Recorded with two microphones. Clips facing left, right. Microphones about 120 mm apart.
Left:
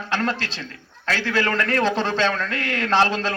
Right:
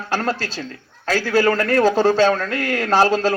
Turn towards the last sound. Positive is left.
turn(degrees=-40)  # may be behind; listen again after turning